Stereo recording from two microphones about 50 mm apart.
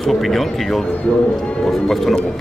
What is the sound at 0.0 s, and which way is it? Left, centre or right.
A man's voice, centre.